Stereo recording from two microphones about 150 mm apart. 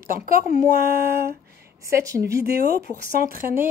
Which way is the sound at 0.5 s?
60° left (ahead or behind).